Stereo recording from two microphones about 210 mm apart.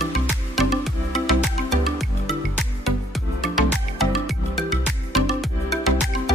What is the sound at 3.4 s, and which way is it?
Music, centre (ahead or behind).